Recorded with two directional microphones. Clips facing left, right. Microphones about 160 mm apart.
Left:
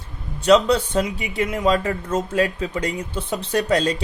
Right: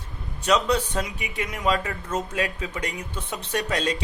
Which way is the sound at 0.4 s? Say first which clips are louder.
Left 6 dB; 30° left (ahead or behind).